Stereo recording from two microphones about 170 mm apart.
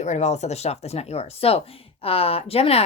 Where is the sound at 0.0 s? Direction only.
40° left (ahead or behind).